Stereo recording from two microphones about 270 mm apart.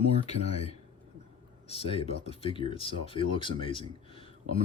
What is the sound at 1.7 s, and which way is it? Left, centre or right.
Speech, left.